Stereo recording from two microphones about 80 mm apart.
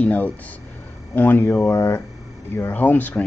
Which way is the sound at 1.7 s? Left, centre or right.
Left.